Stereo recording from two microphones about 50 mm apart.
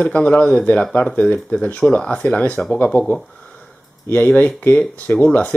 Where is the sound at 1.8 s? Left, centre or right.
Centre.